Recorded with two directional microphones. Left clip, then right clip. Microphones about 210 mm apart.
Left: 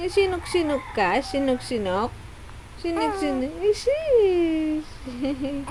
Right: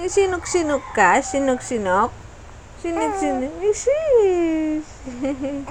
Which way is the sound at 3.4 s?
5° left (ahead or behind).